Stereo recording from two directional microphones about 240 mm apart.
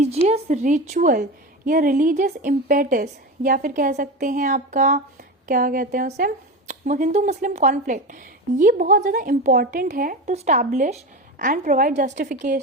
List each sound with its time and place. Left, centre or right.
0.3 s speech: right